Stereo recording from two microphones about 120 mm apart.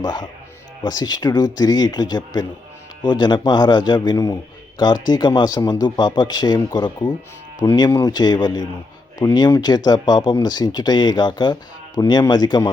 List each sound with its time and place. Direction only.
0.0 s speech: 35° left (ahead or behind)